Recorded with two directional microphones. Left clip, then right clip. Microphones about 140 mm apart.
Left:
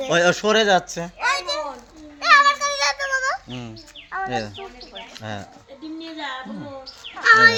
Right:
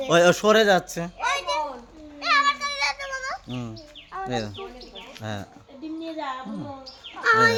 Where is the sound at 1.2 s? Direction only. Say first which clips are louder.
Left 2 dB; 25° left (ahead or behind).